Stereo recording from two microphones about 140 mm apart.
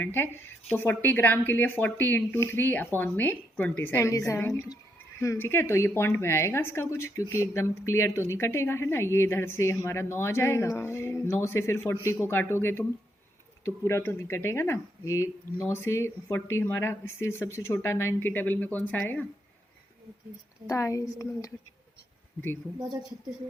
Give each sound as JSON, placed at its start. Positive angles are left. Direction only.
{"t": 0.0, "sound": "a woman's voice", "side_deg": 15}
{"t": 20.7, "sound": "a woman's voice", "side_deg": 20}